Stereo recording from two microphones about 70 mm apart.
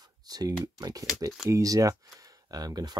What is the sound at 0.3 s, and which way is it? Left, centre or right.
Speech, right.